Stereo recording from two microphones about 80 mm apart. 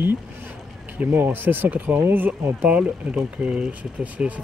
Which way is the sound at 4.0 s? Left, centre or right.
Centre.